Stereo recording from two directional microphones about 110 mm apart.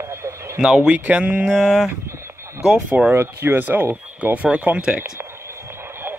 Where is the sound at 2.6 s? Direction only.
15° right (ahead or behind).